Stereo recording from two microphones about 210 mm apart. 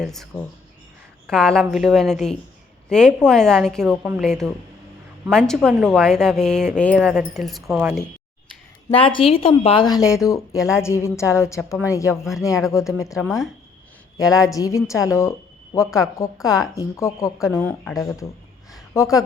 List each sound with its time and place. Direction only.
0.0 s a woman's voice: centre (ahead or behind)
7.6 s speech: 10° right (ahead or behind)
9.0 s a woman's voice: 25° left (ahead or behind)
13.2 s a woman's voice: centre (ahead or behind)
14.2 s a woman's voice: 15° left (ahead or behind)